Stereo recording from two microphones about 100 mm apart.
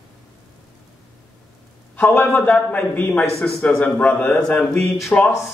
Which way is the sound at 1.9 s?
15° left (ahead or behind).